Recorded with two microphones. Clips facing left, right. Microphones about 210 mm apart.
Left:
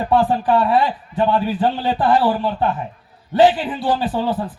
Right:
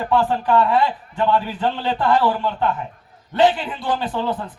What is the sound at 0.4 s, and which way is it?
A man's voice, 35° left (ahead or behind).